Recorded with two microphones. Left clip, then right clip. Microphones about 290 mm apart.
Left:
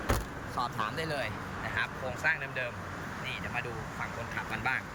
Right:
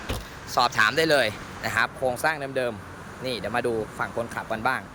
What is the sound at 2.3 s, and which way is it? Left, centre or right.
Speech, centre.